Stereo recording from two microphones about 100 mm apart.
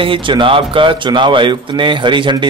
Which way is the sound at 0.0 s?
55° right (ahead or behind).